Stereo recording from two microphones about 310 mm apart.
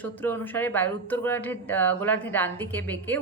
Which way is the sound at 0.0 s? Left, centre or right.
Centre.